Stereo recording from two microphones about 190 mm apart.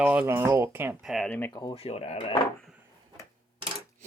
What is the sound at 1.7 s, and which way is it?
Speech, 30° left (ahead or behind).